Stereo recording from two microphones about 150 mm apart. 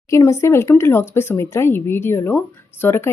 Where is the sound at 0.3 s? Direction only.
20° left (ahead or behind).